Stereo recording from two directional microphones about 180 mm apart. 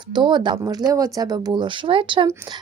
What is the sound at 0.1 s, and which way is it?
A woman's voice, 25° right (ahead or behind).